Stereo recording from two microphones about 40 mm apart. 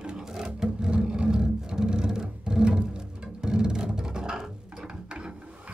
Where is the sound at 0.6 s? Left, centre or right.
Right.